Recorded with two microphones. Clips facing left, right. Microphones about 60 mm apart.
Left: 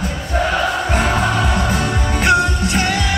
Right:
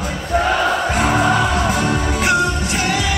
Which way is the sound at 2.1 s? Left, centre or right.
Left.